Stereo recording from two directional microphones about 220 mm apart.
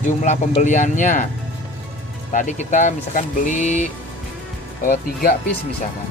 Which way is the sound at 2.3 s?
35° left (ahead or behind).